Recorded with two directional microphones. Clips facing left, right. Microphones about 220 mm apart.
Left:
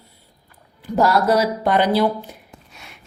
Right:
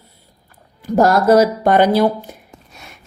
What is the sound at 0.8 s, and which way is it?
Speech, 45° right (ahead or behind).